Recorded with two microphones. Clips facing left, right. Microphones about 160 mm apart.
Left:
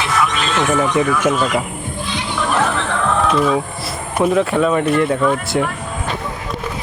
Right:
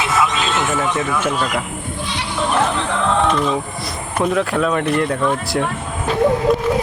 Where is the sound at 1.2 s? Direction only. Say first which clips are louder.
Left 3 dB; 10° left (ahead or behind).